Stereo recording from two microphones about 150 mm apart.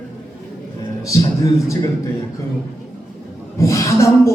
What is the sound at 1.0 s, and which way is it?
Speech, 20° left (ahead or behind).